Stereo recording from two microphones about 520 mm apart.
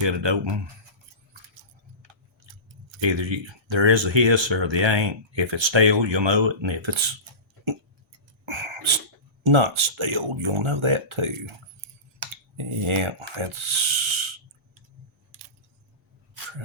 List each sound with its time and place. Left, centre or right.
0.0 s speech: right
3.0 s speech: right
8.4 s sneeze: right
9.4 s speech: right
12.5 s speech: right